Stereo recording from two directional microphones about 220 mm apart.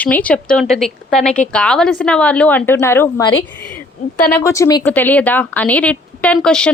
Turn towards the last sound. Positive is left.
turn(degrees=5)  # may be behind; listen again after turning